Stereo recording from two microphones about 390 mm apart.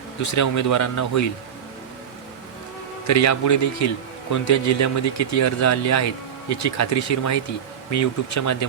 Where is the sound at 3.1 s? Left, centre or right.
Left.